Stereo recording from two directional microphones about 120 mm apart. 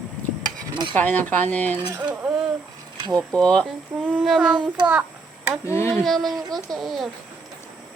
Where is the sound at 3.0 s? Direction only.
30° right (ahead or behind).